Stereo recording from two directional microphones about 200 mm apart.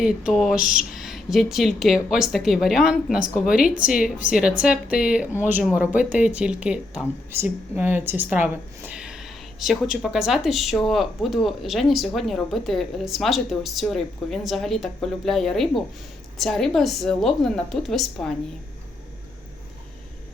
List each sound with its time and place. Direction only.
0.0 s speech: 5° right (ahead or behind)
0.6 s a sound: 40° left (ahead or behind)
0.9 s speech: centre (ahead or behind)